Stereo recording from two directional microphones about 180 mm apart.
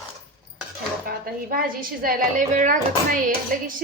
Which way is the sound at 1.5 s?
50° right (ahead or behind).